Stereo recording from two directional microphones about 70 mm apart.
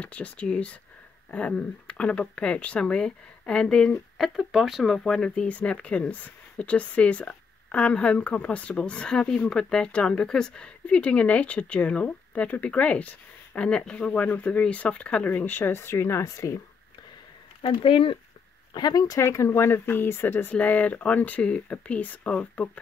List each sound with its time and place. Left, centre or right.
0.0 s speech: centre
4.2 s speech: centre; by 16.5 s left
18.8 s speech: left
19.1 s speech: left
20.5 s speech: left